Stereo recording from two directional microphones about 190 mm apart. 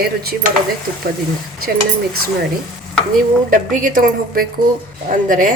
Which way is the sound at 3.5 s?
45° right (ahead or behind).